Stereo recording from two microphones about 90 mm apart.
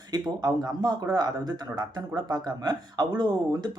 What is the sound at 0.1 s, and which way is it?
Speech, 50° right (ahead or behind).